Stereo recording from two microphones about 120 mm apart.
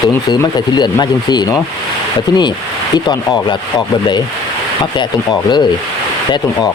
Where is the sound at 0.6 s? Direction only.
35° left (ahead or behind).